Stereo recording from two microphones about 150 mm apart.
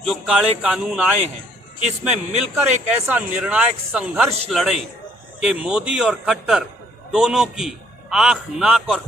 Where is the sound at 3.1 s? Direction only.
10° right (ahead or behind).